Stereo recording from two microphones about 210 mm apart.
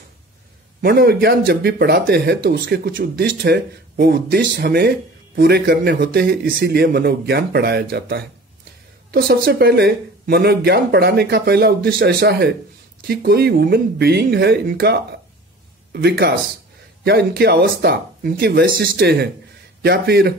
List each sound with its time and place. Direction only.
0.7 s speech: 50° right (ahead or behind)